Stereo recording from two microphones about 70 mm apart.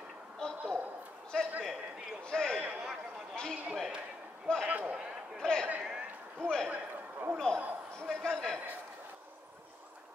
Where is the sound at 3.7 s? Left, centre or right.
Centre.